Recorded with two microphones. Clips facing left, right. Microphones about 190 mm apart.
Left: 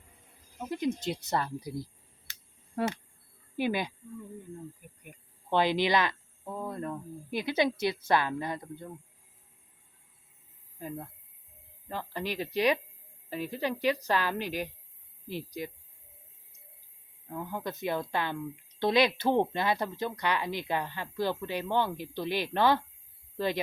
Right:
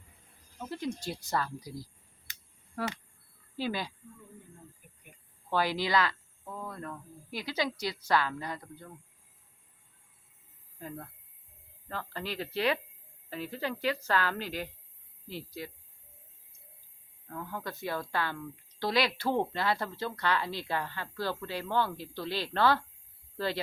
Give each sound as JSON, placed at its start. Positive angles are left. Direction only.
{"t": 0.6, "sound": "speech", "side_deg": 15}
{"t": 5.5, "sound": "speech", "side_deg": 20}
{"t": 10.8, "sound": "a woman's voice", "side_deg": 15}
{"t": 17.2, "sound": "a woman's voice", "side_deg": 20}